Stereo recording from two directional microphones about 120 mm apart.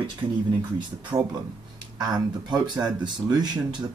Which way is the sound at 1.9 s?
35° right (ahead or behind).